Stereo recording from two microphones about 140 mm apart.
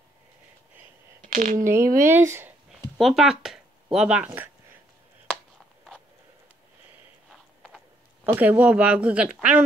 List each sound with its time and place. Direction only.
1.3 s speech: 65° right (ahead or behind)
1.6 s speech: 20° right (ahead or behind)
3.0 s speech: centre (ahead or behind)
8.2 s speech: 15° right (ahead or behind)